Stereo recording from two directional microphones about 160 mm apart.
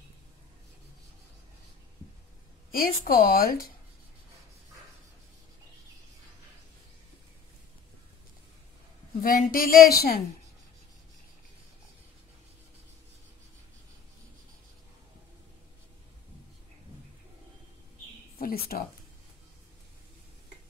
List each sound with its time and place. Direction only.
2.7 s a woman's voice: 65° left (ahead or behind)
9.2 s a woman's voice: 60° left (ahead or behind)
18.4 s a sound: 70° left (ahead or behind)